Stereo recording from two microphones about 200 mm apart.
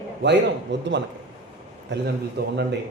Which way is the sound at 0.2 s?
60° right (ahead or behind).